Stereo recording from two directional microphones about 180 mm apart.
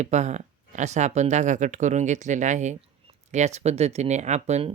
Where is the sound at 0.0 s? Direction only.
40° right (ahead or behind).